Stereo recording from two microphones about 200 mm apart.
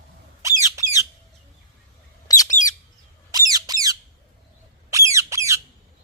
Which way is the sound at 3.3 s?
20° right (ahead or behind).